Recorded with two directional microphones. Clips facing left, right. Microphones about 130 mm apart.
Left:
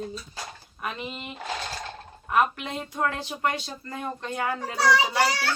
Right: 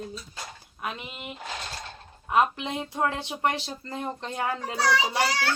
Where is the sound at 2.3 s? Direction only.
20° right (ahead or behind).